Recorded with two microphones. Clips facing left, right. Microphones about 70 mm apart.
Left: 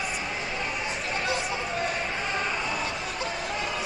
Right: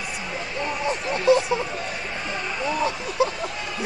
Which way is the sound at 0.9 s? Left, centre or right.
Right.